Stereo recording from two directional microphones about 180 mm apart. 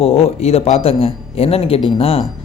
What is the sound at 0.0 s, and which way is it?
Speech, 35° left (ahead or behind).